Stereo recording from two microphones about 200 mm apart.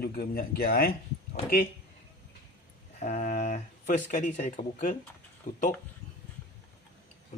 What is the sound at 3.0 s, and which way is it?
Speech, 35° left (ahead or behind).